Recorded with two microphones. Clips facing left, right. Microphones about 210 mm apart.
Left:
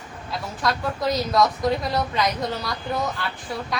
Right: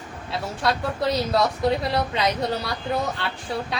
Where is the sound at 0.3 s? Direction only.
30° right (ahead or behind).